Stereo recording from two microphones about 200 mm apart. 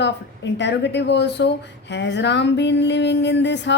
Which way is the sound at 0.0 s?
60° left (ahead or behind).